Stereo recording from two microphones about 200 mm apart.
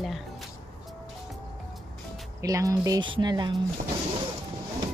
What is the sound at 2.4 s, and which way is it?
Speech, 15° right (ahead or behind).